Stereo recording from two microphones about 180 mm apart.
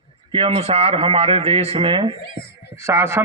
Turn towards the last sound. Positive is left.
turn(degrees=-15)  # may be behind; listen again after turning